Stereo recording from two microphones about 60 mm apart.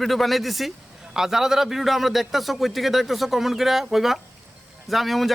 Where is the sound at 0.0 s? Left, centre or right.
Centre.